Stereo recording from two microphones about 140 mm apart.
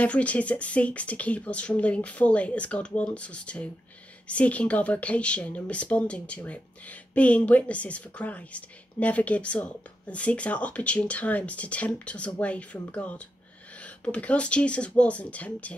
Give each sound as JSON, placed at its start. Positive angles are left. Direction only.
{"t": 0.0, "sound": "speech", "side_deg": 10}